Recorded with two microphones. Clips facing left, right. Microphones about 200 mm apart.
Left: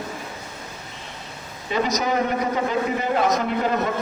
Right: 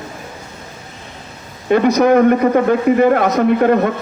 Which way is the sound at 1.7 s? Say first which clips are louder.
Right 11 dB; 60° right (ahead or behind).